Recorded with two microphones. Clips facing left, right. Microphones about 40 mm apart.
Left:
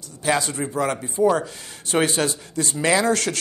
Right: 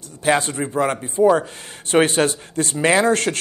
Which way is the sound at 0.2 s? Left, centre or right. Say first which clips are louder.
Right 3 dB; right.